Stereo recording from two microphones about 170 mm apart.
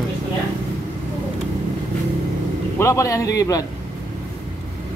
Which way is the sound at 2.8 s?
20° left (ahead or behind).